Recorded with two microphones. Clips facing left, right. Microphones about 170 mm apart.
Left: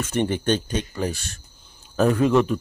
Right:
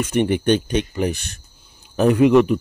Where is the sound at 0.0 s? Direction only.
15° right (ahead or behind).